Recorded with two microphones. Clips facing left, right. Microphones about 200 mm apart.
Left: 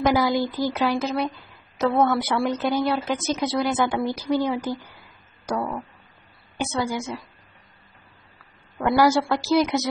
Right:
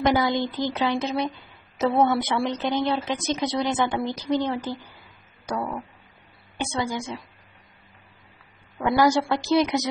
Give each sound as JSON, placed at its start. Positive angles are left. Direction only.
{"t": 0.0, "sound": "speech", "side_deg": 0}
{"t": 6.6, "sound": "speech", "side_deg": 5}
{"t": 8.7, "sound": "speech", "side_deg": 5}